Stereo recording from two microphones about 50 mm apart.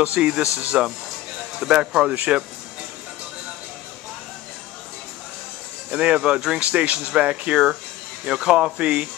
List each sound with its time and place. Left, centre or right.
0.2 s speech: centre
5.9 s speech: centre